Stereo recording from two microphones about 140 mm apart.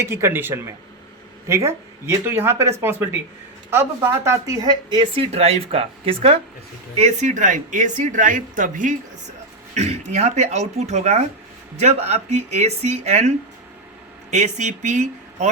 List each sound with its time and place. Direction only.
0.0 s speech: 20° right (ahead or behind); by 6.4 s 45° right (ahead or behind)
6.9 s speech: 55° right (ahead or behind)
9.7 s speech: 55° right (ahead or behind)